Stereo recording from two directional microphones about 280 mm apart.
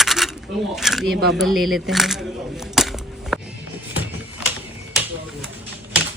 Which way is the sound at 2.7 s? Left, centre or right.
Centre.